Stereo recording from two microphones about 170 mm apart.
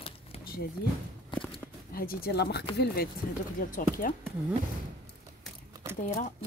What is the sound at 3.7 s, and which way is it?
Speech, 50° left (ahead or behind).